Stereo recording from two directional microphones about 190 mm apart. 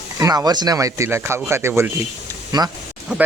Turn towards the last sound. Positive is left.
turn(degrees=-5)  # may be behind; listen again after turning